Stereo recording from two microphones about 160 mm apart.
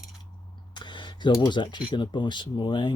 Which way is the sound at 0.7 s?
30° left (ahead or behind).